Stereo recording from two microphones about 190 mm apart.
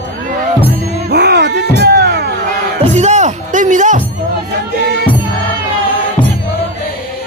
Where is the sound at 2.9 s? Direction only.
35° right (ahead or behind).